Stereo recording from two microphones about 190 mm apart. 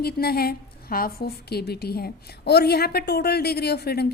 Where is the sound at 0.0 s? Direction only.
55° left (ahead or behind).